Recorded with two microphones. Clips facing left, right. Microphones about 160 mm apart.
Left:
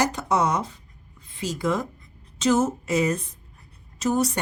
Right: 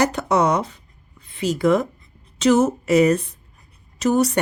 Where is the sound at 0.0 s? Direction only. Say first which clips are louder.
Right 4 dB; 70° right (ahead or behind).